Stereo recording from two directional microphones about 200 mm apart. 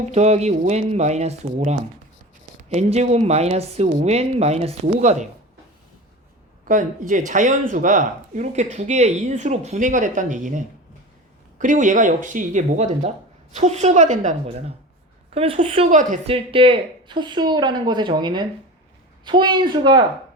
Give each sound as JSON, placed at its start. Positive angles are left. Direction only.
{"t": 0.0, "sound": "speech", "side_deg": -35}
{"t": 6.7, "sound": "speech", "side_deg": -40}
{"t": 11.6, "sound": "speech", "side_deg": -40}
{"t": 16.3, "sound": "speech", "side_deg": -25}